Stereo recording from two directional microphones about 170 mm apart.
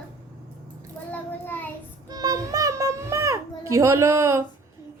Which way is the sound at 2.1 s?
25° right (ahead or behind).